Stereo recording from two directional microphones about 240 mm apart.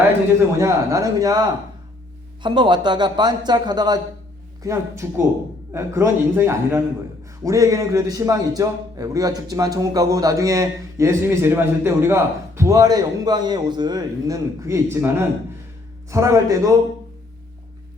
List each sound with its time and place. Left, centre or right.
0.5 s a man's voice: centre